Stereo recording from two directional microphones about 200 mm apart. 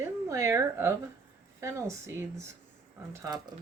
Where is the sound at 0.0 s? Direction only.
15° right (ahead or behind).